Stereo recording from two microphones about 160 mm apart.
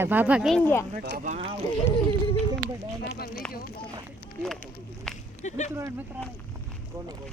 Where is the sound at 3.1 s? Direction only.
75° left (ahead or behind).